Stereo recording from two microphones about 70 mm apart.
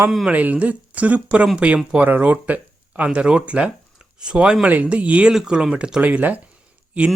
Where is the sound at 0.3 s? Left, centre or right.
Right.